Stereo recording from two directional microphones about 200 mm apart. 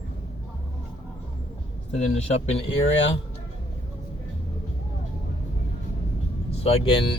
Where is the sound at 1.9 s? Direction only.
35° left (ahead or behind).